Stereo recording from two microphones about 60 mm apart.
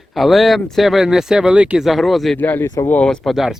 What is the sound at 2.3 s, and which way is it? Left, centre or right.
Speech, left.